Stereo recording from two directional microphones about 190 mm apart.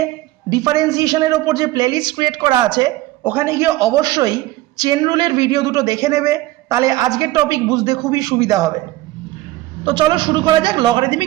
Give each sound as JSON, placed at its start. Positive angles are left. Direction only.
{"t": 0.5, "sound": "a man's voice", "side_deg": -20}
{"t": 9.8, "sound": "a man's voice", "side_deg": -25}